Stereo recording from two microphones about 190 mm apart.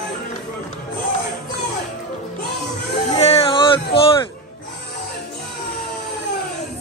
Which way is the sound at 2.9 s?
30° left (ahead or behind).